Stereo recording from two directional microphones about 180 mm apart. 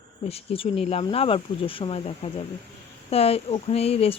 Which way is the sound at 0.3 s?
30° left (ahead or behind).